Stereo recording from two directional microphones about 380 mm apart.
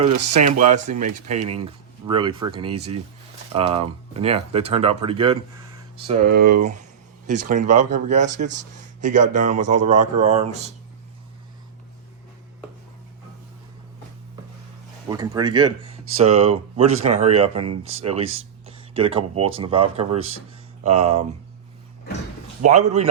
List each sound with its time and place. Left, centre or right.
0.0 s speech: centre
6.2 s speech: right
7.4 s speech: centre
15.1 s speech: centre
22.6 s a man's voice: right